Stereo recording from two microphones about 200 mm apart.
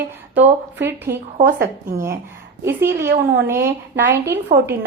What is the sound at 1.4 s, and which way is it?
Speech, 45° right (ahead or behind).